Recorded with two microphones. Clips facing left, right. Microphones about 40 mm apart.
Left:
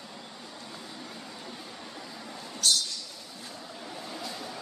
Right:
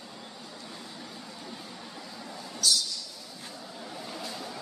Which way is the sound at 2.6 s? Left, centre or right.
Left.